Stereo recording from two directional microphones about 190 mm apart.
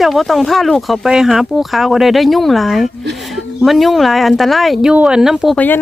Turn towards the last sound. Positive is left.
turn(degrees=5)  # may be behind; listen again after turning